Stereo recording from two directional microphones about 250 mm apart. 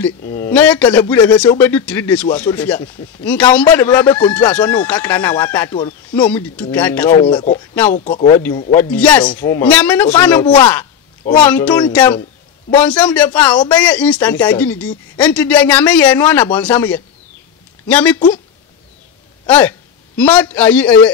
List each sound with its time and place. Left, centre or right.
0.3 s a man's voice: centre
7.2 s speech: centre
8.9 s a man's voice: centre
12.7 s a man's voice: centre
19.4 s speech: centre